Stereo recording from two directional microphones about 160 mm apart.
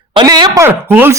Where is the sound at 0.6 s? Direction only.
15° right (ahead or behind).